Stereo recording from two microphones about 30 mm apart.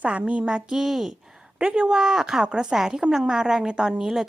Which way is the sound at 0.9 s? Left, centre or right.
Centre.